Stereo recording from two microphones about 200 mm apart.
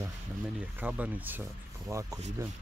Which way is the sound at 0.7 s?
10° right (ahead or behind).